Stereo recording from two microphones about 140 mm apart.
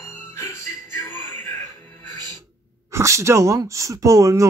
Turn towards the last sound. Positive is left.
turn(degrees=-20)  # may be behind; listen again after turning